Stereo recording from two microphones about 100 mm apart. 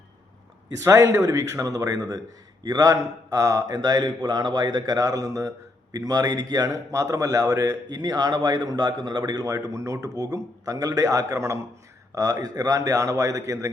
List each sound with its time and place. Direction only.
0.8 s a man's voice: 30° right (ahead or behind); by 9.5 s 45° right (ahead or behind)
9.5 s a man's voice: 30° right (ahead or behind)